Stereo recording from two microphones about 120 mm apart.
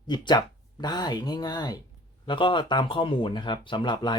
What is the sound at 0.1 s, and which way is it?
Speech, 35° left (ahead or behind).